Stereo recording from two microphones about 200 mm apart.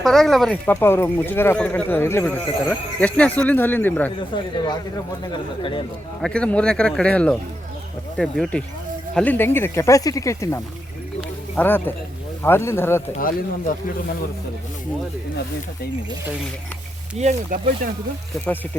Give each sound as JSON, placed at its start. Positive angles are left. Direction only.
{"t": 0.0, "sound": "speech", "side_deg": 0}
{"t": 4.2, "sound": "speech", "side_deg": 25}
{"t": 6.2, "sound": "speech", "side_deg": 5}
{"t": 11.2, "sound": "a sound", "side_deg": 10}
{"t": 12.4, "sound": "speech", "side_deg": 10}
{"t": 17.2, "sound": "speech", "side_deg": -40}